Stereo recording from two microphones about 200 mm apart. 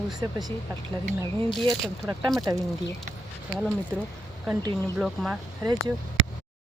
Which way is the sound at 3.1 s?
40° right (ahead or behind).